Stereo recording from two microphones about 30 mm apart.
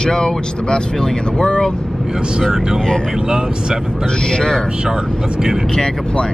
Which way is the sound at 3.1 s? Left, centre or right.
Right.